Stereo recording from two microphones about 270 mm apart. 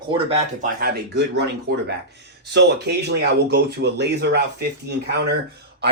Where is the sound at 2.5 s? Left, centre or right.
Right.